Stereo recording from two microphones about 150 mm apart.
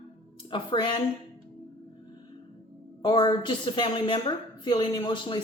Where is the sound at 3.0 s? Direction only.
30° left (ahead or behind).